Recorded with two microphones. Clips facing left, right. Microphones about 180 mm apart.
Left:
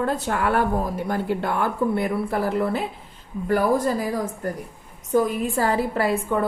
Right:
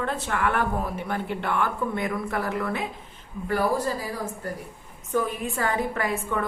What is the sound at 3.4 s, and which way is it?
A woman's voice, 45° left (ahead or behind).